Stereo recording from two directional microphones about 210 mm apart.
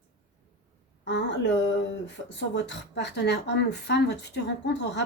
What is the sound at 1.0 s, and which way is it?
Speech, 55° left (ahead or behind).